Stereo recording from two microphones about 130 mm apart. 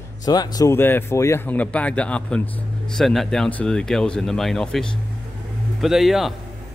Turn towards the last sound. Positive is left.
turn(degrees=0)  # may be behind; listen again after turning